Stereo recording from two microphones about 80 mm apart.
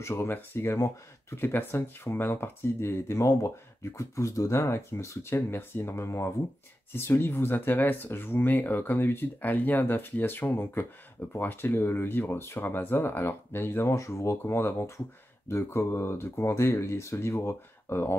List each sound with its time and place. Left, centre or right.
0.0 s speech: left